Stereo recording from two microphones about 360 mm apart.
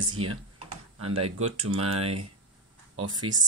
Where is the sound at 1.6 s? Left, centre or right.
Right.